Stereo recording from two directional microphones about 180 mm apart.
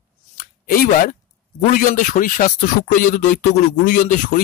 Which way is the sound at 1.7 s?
50° left (ahead or behind).